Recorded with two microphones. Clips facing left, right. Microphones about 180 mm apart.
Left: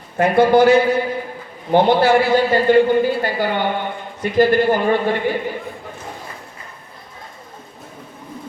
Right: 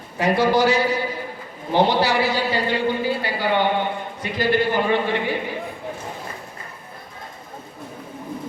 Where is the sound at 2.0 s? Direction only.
50° left (ahead or behind).